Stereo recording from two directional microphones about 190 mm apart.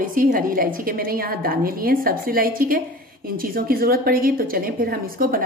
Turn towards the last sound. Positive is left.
turn(degrees=-50)  # may be behind; listen again after turning